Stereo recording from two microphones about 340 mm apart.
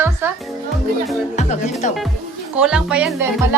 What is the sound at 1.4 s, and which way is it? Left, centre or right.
Speech, centre.